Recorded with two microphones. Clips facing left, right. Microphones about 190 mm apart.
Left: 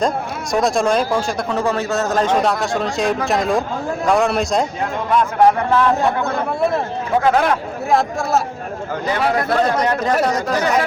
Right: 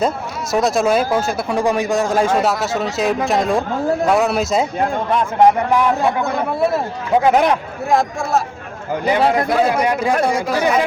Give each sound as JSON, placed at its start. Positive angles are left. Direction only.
{"t": 0.5, "sound": "a man's voice", "side_deg": 0}
{"t": 5.4, "sound": "a man's voice", "side_deg": -15}
{"t": 6.3, "sound": "speech", "side_deg": -5}
{"t": 7.2, "sound": "a man's voice", "side_deg": -20}
{"t": 7.9, "sound": "speech", "side_deg": 0}
{"t": 9.2, "sound": "speech", "side_deg": -25}
{"t": 9.5, "sound": "a man's voice", "side_deg": -10}